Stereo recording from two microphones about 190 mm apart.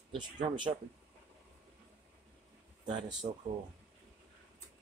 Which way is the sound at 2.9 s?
25° right (ahead or behind).